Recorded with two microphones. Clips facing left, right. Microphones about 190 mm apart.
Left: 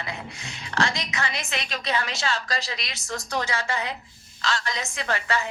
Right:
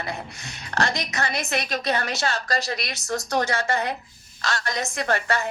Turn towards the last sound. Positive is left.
turn(degrees=-50)  # may be behind; listen again after turning